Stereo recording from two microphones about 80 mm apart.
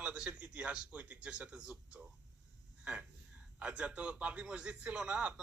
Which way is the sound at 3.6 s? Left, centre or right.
Centre.